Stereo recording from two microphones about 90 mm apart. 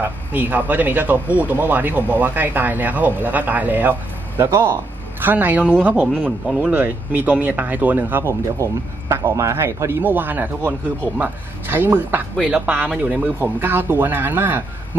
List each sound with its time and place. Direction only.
0.0 s speech: 20° right (ahead or behind)